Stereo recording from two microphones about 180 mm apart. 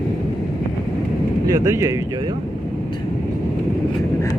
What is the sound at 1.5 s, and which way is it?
Speech, 15° right (ahead or behind).